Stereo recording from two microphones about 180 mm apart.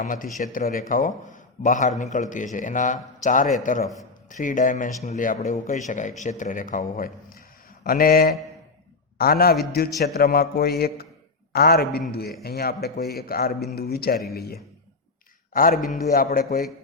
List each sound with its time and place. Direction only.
0.0 s a man's voice: 50° left (ahead or behind)